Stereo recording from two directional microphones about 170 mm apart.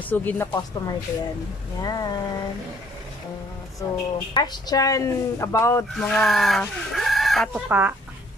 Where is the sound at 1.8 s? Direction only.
25° left (ahead or behind).